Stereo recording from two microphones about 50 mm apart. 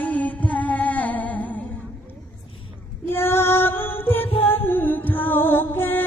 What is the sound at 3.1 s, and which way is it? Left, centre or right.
Music, left.